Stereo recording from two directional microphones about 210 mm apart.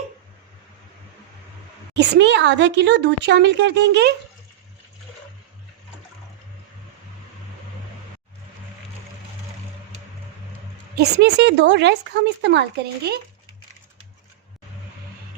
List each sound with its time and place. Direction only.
2.0 s speech: 55° right (ahead or behind)
10.9 s speech: 55° right (ahead or behind)